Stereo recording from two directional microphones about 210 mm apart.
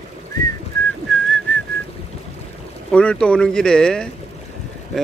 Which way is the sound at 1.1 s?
5° left (ahead or behind).